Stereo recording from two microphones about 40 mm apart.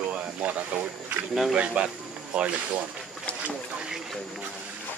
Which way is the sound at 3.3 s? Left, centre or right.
Left.